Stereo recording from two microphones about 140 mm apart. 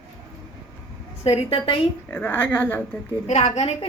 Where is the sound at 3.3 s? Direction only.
55° left (ahead or behind).